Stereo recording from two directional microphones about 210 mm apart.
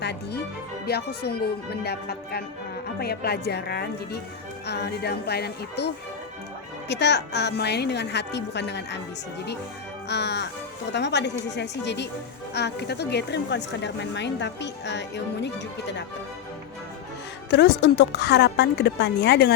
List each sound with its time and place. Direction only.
0.0 s a woman's voice: 50° left (ahead or behind)
10.1 s speech: 55° left (ahead or behind)
17.5 s a woman's voice: 55° left (ahead or behind)